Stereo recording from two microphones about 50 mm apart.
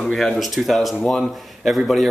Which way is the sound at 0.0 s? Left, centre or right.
Centre.